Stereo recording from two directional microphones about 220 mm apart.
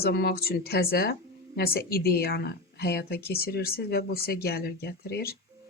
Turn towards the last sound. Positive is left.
turn(degrees=45)  # may be behind; listen again after turning